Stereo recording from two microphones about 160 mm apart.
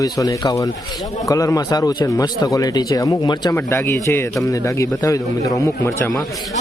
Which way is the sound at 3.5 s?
15° left (ahead or behind).